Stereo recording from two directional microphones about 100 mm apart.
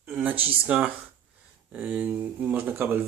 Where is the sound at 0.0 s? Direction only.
15° right (ahead or behind).